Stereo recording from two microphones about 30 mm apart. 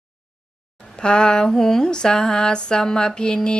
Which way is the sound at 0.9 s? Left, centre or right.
Left.